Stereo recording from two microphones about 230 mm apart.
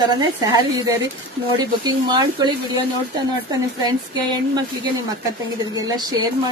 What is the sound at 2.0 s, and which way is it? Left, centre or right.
Speech, centre.